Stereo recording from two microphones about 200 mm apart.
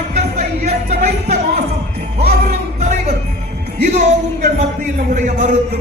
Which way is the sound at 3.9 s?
35° right (ahead or behind).